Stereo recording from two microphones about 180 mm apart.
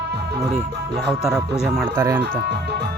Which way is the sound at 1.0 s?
Centre (ahead or behind).